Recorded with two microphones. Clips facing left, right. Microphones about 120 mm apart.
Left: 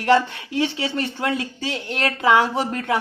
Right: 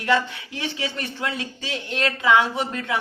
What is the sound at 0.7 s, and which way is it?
Speech, 35° left (ahead or behind).